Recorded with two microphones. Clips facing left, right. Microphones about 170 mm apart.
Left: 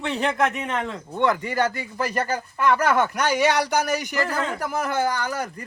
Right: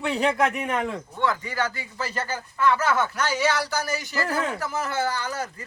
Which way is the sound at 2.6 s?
15° left (ahead or behind).